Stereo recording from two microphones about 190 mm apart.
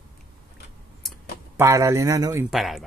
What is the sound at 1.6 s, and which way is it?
Speech, 15° right (ahead or behind).